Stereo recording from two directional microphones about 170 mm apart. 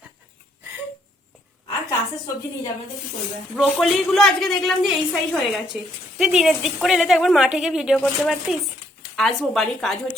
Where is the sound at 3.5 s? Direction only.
Centre (ahead or behind).